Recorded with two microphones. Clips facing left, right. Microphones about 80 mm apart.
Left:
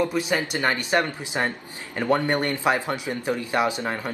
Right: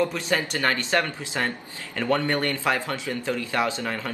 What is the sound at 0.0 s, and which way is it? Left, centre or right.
A man's voice, centre.